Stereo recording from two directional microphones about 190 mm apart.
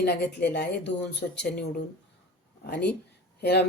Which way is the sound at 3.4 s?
60° left (ahead or behind).